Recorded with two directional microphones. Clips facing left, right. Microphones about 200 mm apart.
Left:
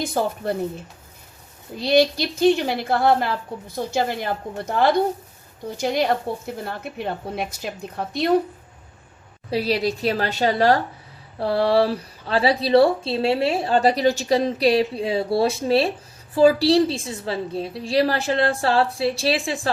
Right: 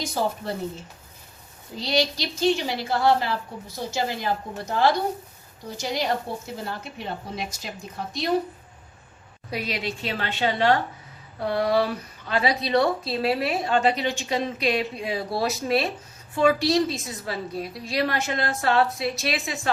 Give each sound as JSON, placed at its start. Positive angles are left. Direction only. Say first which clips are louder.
{"t": 0.0, "sound": "a woman's voice", "louder": "left 3 dB", "side_deg": 55}
{"t": 1.8, "sound": "a woman's voice", "louder": "left 7 dB", "side_deg": 55}
{"t": 9.5, "sound": "a woman's voice", "louder": "left 8 dB", "side_deg": 35}